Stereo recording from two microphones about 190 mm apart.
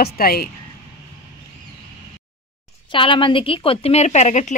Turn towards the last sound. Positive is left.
turn(degrees=40)  # may be behind; listen again after turning